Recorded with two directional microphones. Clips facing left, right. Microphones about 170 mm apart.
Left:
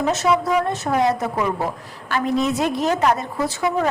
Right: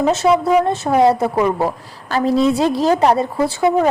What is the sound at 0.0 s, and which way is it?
A woman's voice, 30° right (ahead or behind).